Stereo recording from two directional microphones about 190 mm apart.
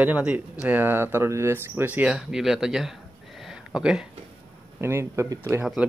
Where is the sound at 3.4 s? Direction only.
5° right (ahead or behind).